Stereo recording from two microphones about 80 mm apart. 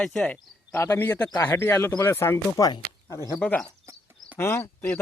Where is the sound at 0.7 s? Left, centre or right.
Left.